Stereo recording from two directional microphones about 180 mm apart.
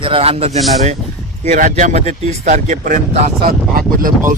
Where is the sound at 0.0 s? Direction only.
30° right (ahead or behind).